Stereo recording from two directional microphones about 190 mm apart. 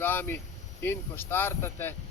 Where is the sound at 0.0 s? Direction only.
10° left (ahead or behind).